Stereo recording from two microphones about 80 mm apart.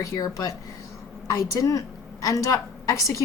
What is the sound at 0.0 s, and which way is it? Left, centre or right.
A woman's voice, left.